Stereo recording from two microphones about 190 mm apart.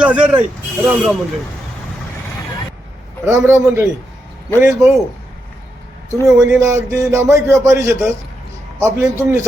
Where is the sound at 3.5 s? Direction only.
15° right (ahead or behind).